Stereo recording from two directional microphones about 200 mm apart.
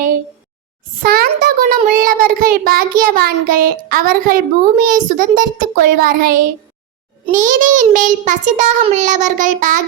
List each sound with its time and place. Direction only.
1.0 s child singing: 50° right (ahead or behind)